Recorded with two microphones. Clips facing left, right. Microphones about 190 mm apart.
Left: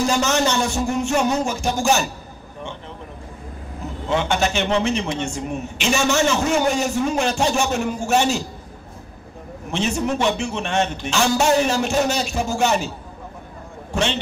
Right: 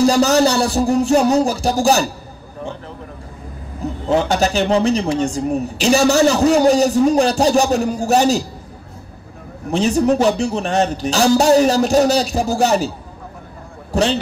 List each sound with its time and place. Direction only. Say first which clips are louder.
0.0 s a man's voice: right 7 dB; 35° right (ahead or behind)
4.1 s a man's voice: right 4 dB; 35° right (ahead or behind)
9.7 s a man's voice: right 7 dB; 35° right (ahead or behind)
13.9 s a man's voice: right 6 dB; 35° right (ahead or behind)